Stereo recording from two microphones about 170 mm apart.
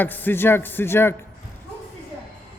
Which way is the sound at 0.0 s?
10° left (ahead or behind).